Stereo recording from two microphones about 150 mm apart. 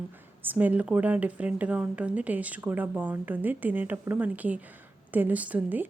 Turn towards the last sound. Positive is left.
turn(degrees=-10)  # may be behind; listen again after turning